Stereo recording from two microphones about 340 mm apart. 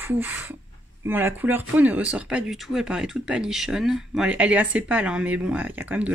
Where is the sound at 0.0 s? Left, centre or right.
Centre.